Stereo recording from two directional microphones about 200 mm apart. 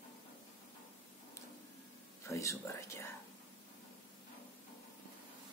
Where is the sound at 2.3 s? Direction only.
15° left (ahead or behind).